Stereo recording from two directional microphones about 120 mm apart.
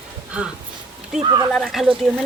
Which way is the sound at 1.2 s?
40° right (ahead or behind).